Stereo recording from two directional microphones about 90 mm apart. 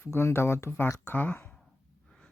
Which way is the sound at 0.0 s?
30° left (ahead or behind).